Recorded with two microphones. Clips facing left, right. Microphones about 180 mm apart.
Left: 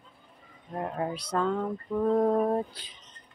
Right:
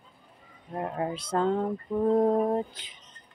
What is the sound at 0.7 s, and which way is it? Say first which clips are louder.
Speech: right 1 dB; 20° right (ahead or behind).